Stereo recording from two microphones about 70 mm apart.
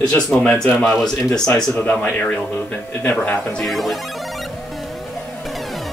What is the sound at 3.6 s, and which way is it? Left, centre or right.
Speech, centre.